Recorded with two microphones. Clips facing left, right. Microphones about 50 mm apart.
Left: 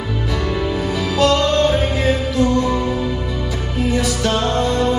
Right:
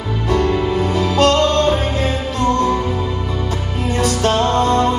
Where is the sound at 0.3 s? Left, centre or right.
Right.